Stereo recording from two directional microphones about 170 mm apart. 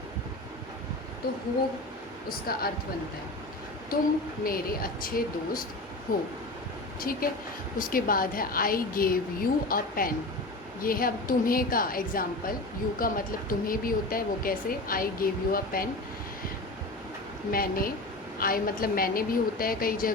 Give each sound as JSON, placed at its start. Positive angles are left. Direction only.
{"t": 2.5, "sound": "speech", "side_deg": 60}
{"t": 4.4, "sound": "speech", "side_deg": 60}
{"t": 7.0, "sound": "speech", "side_deg": 60}
{"t": 17.5, "sound": "speech", "side_deg": 60}